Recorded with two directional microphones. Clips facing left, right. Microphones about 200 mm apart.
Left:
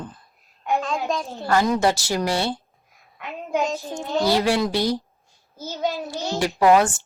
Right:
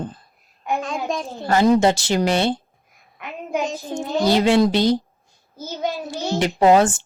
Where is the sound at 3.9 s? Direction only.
20° right (ahead or behind).